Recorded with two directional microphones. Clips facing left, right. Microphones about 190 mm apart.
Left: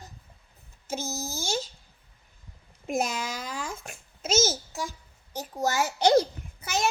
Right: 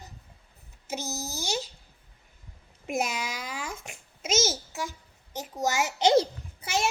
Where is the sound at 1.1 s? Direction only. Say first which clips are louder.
Left 1 dB; 50° left (ahead or behind).